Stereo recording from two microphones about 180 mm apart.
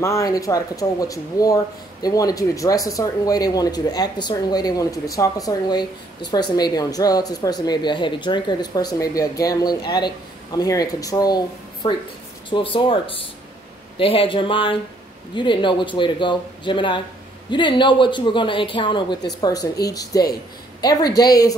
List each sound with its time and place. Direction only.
0.0 s speech: 20° left (ahead or behind)